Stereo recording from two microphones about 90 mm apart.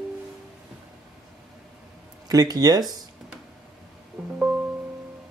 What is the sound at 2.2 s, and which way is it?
Speech, 45° right (ahead or behind).